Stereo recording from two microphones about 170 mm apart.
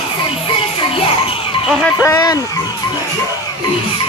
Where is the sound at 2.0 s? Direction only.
20° left (ahead or behind).